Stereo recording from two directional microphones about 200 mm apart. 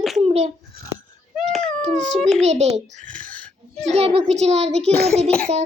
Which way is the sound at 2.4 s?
35° right (ahead or behind).